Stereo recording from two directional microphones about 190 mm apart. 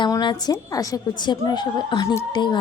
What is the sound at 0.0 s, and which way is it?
A woman's voice, 25° left (ahead or behind).